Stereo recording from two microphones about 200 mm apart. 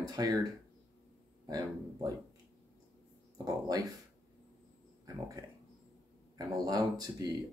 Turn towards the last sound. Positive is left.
turn(degrees=-20)  # may be behind; listen again after turning